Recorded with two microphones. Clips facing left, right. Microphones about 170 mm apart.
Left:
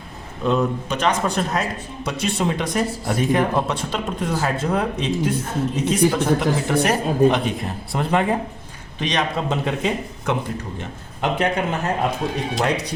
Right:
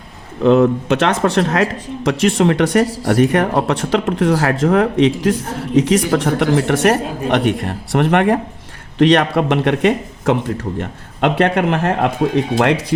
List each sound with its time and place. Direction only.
0.4 s a man's voice: 75° right (ahead or behind)